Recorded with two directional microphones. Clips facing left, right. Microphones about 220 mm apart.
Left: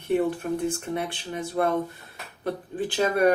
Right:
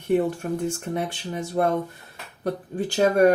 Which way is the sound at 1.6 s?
35° right (ahead or behind).